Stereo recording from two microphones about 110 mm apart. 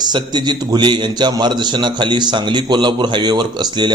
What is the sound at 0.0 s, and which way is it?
A man's voice, 40° right (ahead or behind).